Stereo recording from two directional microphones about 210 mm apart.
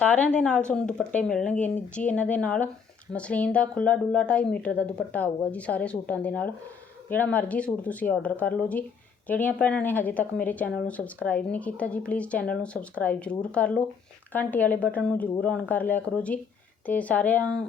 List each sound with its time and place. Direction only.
0.0 s speech: 5° left (ahead or behind)